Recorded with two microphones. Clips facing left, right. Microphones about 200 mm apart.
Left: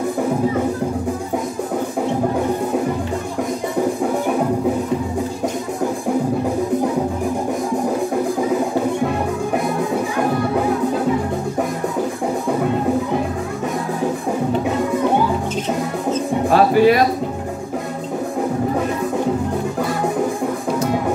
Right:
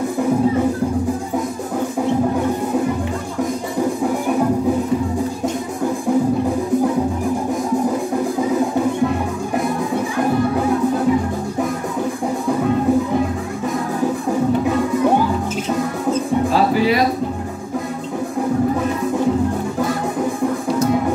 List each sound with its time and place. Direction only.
16.4 s music: 55° left (ahead or behind)